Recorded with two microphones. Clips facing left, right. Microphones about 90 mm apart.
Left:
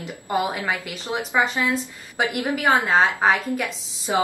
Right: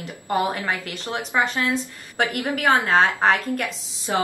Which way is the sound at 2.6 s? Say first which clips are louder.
Even; centre (ahead or behind).